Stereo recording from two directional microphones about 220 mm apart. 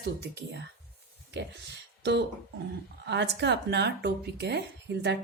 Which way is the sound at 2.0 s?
50° right (ahead or behind).